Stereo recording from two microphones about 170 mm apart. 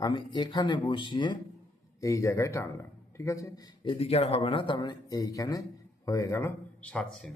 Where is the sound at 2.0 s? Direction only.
15° left (ahead or behind).